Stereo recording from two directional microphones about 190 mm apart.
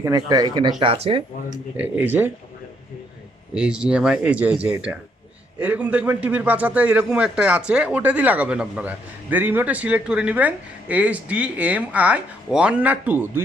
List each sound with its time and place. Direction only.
0.0 s speech: 20° right (ahead or behind)
1.7 s a man's voice: 10° right (ahead or behind)
3.5 s a man's voice: 5° right (ahead or behind)